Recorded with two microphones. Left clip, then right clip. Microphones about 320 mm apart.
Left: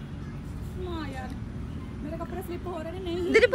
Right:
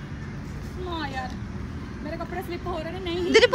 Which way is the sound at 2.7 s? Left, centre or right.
Centre.